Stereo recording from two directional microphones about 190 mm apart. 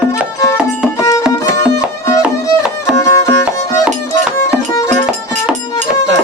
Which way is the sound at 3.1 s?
15° left (ahead or behind).